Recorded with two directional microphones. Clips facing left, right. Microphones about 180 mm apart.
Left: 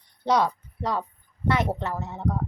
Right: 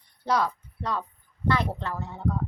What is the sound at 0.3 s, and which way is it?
Speech, 20° left (ahead or behind).